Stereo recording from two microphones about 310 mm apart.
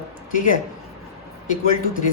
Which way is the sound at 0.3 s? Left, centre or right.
Left.